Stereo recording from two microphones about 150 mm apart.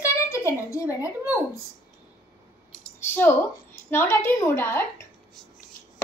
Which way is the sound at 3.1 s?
15° left (ahead or behind).